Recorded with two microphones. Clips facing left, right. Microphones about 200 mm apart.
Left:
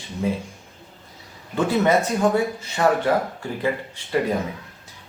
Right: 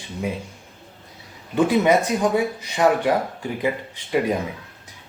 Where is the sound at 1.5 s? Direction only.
15° right (ahead or behind).